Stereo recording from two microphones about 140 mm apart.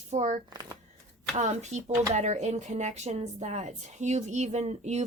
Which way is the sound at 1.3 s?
55° right (ahead or behind).